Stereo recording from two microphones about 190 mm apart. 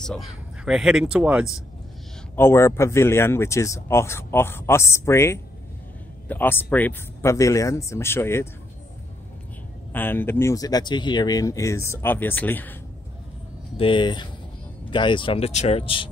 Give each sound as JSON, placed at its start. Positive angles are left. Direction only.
{"t": 0.0, "sound": "speech", "side_deg": 0}
{"t": 2.3, "sound": "speech", "side_deg": 15}
{"t": 9.9, "sound": "speech", "side_deg": 10}
{"t": 13.7, "sound": "speech", "side_deg": 25}